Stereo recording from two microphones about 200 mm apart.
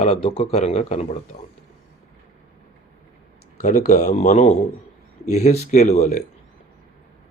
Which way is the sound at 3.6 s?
35° left (ahead or behind).